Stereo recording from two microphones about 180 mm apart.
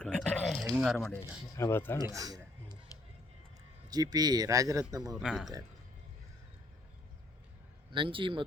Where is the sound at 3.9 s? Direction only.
20° right (ahead or behind).